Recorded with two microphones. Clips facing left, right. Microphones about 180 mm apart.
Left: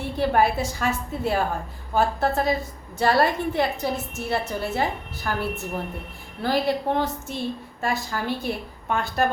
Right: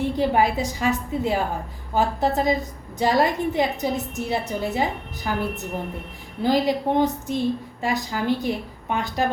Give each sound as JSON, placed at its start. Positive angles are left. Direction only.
{"t": 0.0, "sound": "a woman's voice", "side_deg": -15}